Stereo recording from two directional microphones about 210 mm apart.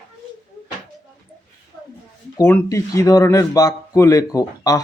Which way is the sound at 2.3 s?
10° left (ahead or behind).